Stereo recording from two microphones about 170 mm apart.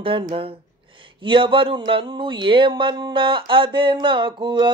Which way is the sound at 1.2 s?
30° right (ahead or behind).